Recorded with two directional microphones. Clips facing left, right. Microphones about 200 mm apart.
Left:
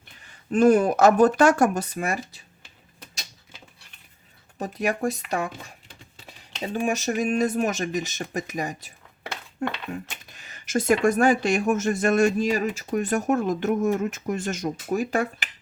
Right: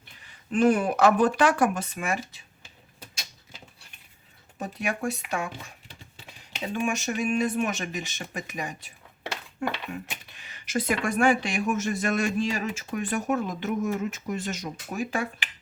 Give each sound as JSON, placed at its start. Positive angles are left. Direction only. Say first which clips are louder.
{"t": 0.2, "sound": "speech", "louder": "left 3 dB", "side_deg": 45}
{"t": 4.6, "sound": "speech", "louder": "left 4 dB", "side_deg": 35}
{"t": 6.7, "sound": "speech", "louder": "left 4 dB", "side_deg": 35}
{"t": 9.9, "sound": "speech", "louder": "left 2 dB", "side_deg": 45}